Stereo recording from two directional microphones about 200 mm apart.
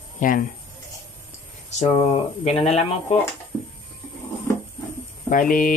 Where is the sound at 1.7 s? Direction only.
35° left (ahead or behind).